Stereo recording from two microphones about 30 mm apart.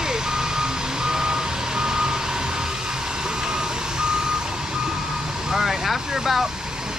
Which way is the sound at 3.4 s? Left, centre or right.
Right.